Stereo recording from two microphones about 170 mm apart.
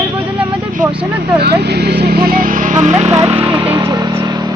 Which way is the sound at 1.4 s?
75° right (ahead or behind).